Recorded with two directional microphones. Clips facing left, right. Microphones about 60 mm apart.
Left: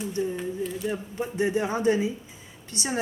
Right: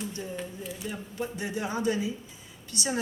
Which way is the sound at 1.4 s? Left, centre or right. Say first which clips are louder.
Left 8 dB; left.